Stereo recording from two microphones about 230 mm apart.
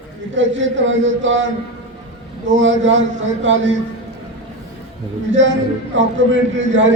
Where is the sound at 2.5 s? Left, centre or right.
Right.